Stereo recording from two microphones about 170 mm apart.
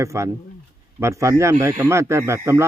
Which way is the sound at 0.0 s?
15° right (ahead or behind).